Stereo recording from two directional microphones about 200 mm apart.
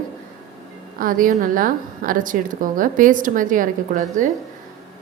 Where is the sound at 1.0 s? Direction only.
40° right (ahead or behind).